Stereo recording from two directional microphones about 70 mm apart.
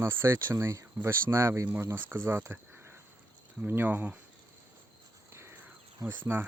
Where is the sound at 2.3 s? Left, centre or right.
Right.